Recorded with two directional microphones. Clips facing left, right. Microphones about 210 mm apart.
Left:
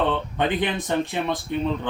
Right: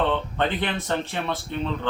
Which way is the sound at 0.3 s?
15° left (ahead or behind).